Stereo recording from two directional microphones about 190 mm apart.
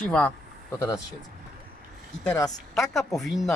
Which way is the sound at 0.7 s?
15° left (ahead or behind).